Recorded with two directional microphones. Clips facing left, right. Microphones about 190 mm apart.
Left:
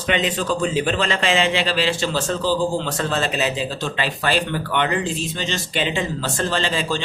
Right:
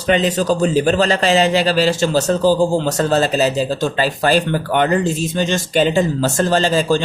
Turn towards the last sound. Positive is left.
turn(degrees=-45)  # may be behind; listen again after turning